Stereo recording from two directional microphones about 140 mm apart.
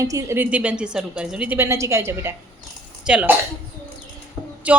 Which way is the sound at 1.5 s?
20° right (ahead or behind).